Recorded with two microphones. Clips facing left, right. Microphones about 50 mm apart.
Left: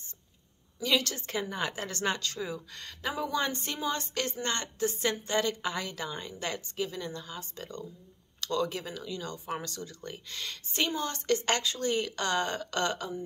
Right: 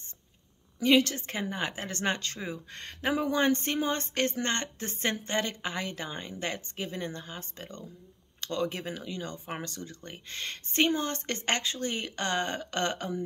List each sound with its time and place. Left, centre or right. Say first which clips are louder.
0.8 s speech: right 6 dB; right